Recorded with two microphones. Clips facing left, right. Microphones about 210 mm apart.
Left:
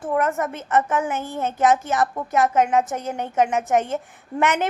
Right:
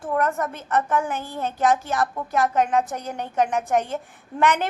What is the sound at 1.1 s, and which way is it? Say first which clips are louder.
A woman's voice: left 3 dB; 20° left (ahead or behind).